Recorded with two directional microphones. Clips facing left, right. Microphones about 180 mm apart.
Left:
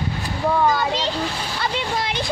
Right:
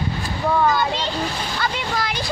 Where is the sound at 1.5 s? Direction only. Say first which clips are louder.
Left 1 dB; 25° left (ahead or behind).